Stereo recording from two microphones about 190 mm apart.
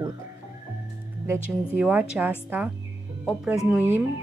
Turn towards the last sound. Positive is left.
turn(degrees=-10)  # may be behind; listen again after turning